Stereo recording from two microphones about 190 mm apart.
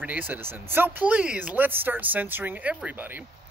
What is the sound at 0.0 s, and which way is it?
Speech, 10° right (ahead or behind).